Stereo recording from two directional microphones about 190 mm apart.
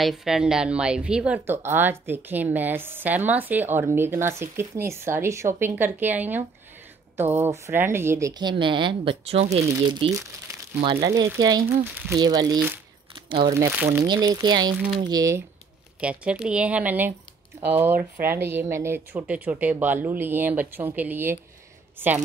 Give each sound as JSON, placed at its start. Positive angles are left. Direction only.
{"t": 0.0, "sound": "a woman's voice", "side_deg": 0}
{"t": 12.5, "sound": "a woman's voice", "side_deg": -10}
{"t": 13.1, "sound": "crumpling", "side_deg": -25}
{"t": 13.6, "sound": "a woman's voice", "side_deg": -10}
{"t": 14.0, "sound": "speech", "side_deg": -25}
{"t": 16.0, "sound": "a woman's voice", "side_deg": -5}